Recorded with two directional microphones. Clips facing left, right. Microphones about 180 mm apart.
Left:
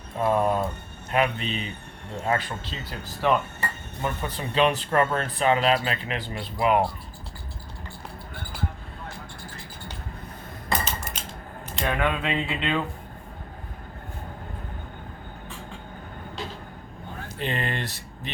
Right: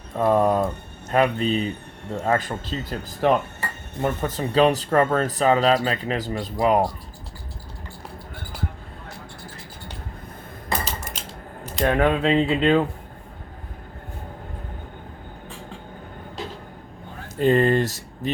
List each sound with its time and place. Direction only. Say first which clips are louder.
0.2 s speech: right 4 dB; 40° right (ahead or behind)
11.6 s speech: right 6 dB; 40° right (ahead or behind)
17.2 s speech: right 12 dB; 45° right (ahead or behind)